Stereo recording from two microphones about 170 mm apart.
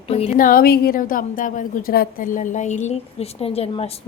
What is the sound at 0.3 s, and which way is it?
A woman's voice, 55° left (ahead or behind).